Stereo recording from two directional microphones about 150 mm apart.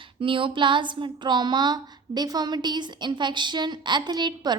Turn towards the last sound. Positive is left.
turn(degrees=-30)  # may be behind; listen again after turning